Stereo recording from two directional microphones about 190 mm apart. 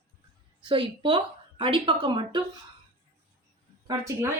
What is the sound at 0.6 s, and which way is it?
A woman's voice, 25° right (ahead or behind).